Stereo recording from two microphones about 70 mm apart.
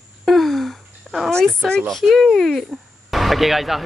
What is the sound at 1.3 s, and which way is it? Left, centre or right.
Speech, centre.